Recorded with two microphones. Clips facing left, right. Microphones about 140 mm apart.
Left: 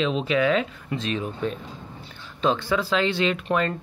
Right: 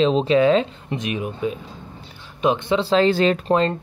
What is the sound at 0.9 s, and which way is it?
Speech, 15° right (ahead or behind).